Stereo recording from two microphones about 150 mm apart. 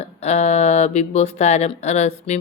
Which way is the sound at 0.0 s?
45° left (ahead or behind).